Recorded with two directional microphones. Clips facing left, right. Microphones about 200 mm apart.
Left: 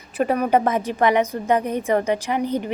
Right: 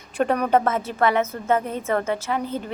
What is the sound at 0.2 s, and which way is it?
A woman's voice, 5° left (ahead or behind).